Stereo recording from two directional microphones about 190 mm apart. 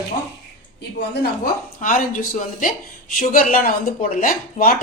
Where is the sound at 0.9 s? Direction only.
60° left (ahead or behind).